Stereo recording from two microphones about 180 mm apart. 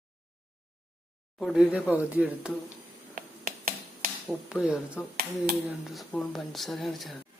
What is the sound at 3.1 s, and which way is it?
Finger snapping, 55° right (ahead or behind).